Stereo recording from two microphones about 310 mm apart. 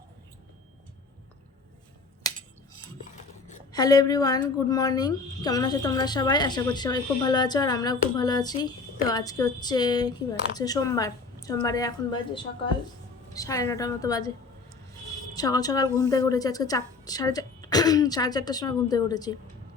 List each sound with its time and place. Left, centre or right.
3.4 s a sound: left
3.8 s a woman's voice: centre
15.4 s a woman's voice: centre